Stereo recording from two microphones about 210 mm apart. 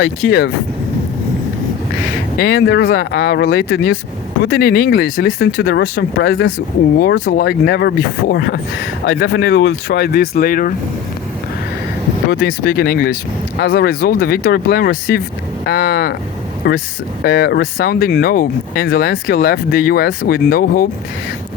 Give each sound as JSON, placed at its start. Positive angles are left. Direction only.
{"t": 0.0, "sound": "speech", "side_deg": 50}
{"t": 2.4, "sound": "speech", "side_deg": 50}
{"t": 9.0, "sound": "speech", "side_deg": 70}
{"t": 12.3, "sound": "speech", "side_deg": 55}